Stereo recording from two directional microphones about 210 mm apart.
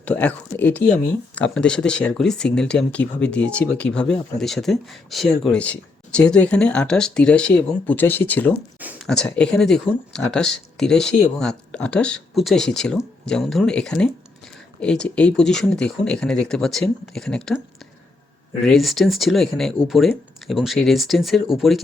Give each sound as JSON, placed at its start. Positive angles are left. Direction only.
{"t": 0.0, "sound": "speech", "side_deg": 10}
{"t": 8.8, "sound": "a sound", "side_deg": -5}
{"t": 9.0, "sound": "speech", "side_deg": 5}
{"t": 18.6, "sound": "speech", "side_deg": 0}